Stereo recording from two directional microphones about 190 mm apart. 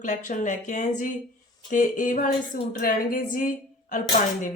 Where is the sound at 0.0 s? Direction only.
40° left (ahead or behind).